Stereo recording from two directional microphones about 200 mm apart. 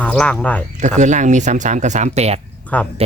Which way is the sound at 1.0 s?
35° right (ahead or behind).